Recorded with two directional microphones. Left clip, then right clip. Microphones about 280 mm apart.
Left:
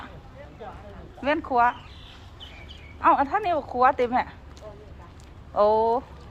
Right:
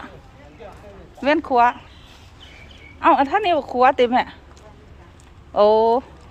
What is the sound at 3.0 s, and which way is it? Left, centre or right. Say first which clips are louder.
Speech: right 5 dB; right.